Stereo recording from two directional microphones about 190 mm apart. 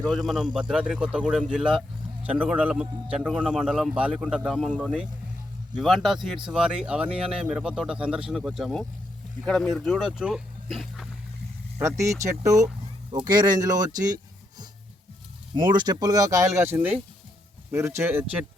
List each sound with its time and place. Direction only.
0.3 s a man's voice: centre (ahead or behind)
11.8 s speech: 15° right (ahead or behind)
15.7 s speech: 20° right (ahead or behind)